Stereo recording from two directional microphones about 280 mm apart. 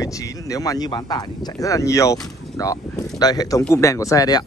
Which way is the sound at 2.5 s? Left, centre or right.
Centre.